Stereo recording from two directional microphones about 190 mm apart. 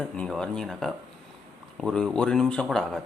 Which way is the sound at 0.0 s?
5° left (ahead or behind).